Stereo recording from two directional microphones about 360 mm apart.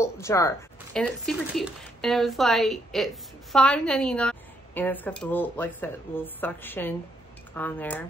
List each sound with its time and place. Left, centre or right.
0.0 s a woman's voice: centre